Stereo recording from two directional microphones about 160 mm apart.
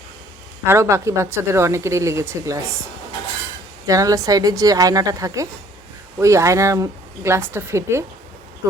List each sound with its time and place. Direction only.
0.6 s a woman's voice: 15° right (ahead or behind)